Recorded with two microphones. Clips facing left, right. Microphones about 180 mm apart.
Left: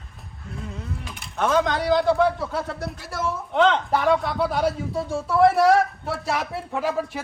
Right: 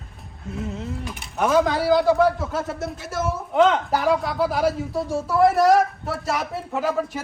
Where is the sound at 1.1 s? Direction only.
5° right (ahead or behind).